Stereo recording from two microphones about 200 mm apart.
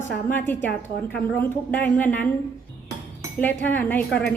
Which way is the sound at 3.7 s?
10° left (ahead or behind).